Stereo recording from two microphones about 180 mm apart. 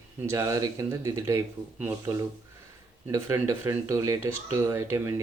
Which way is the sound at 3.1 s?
15° right (ahead or behind).